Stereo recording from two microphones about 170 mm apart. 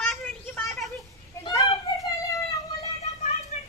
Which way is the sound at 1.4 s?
25° left (ahead or behind).